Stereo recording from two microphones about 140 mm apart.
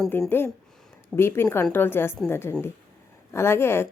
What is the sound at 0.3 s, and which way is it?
Speech, 15° left (ahead or behind).